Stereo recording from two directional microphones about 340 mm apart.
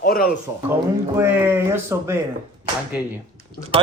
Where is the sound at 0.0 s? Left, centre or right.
Left.